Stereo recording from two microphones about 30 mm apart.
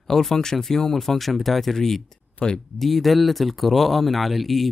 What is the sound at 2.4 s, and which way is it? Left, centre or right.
Speech, left.